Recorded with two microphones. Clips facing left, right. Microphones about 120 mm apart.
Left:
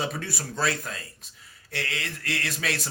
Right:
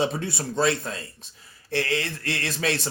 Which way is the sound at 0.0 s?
25° right (ahead or behind).